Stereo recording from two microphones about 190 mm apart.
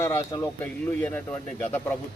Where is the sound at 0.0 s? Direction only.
15° left (ahead or behind).